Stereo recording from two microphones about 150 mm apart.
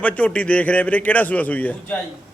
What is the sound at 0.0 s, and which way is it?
A man's voice, 10° left (ahead or behind).